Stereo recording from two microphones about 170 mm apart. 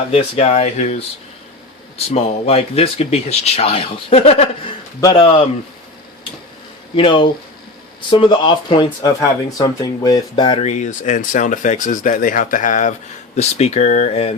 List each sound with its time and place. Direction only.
0.1 s speech: 40° left (ahead or behind)
2.1 s speech: 35° left (ahead or behind)
6.9 s speech: 30° left (ahead or behind)
10.6 s speech: 40° left (ahead or behind)